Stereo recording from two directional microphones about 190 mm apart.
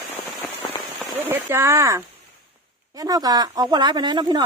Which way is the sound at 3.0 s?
20° right (ahead or behind).